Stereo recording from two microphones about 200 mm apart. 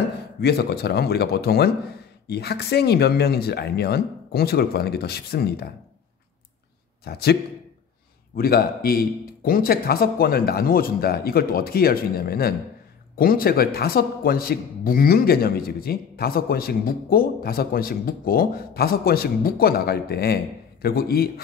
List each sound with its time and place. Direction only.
0.4 s a man's voice: 55° left (ahead or behind)
7.1 s a man's voice: 50° left (ahead or behind)
8.4 s a man's voice: 50° left (ahead or behind)